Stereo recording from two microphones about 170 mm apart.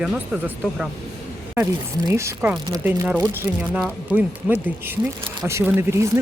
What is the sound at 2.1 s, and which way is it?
Speech, 15° right (ahead or behind).